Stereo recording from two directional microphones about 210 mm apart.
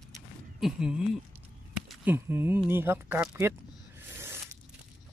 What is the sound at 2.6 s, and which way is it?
Speech, 10° right (ahead or behind).